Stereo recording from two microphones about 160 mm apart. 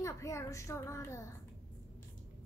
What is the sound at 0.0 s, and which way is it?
A woman's voice, 20° left (ahead or behind).